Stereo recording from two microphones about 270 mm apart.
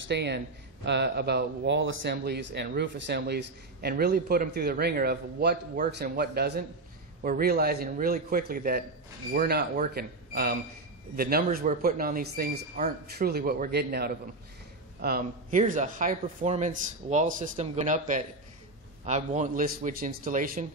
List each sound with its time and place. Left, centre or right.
0.0 s a man's voice: right